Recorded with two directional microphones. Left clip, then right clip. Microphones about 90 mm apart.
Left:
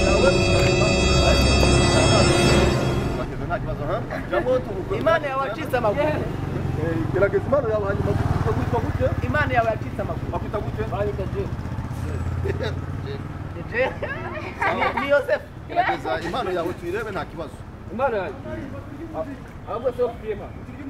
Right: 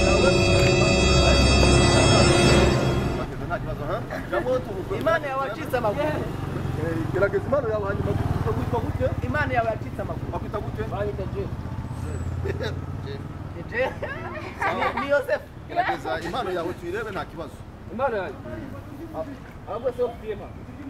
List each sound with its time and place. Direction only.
0.0 s music: centre (ahead or behind)
6.2 s vehicle: 25° right (ahead or behind)
7.2 s speech: 5° right (ahead or behind)
8.0 s speech: 20° left (ahead or behind)
9.0 s speech: centre (ahead or behind)
12.4 s vehicle: 5° right (ahead or behind)
13.7 s speech: centre (ahead or behind)
20.0 s speech: centre (ahead or behind)